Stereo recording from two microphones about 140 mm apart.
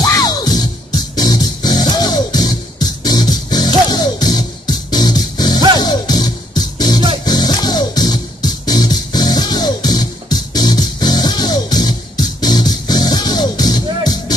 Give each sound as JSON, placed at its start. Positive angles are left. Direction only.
{"t": 0.0, "sound": "music", "side_deg": 25}